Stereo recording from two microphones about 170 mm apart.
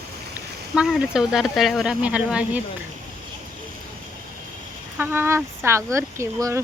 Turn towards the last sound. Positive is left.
turn(degrees=-15)  # may be behind; listen again after turning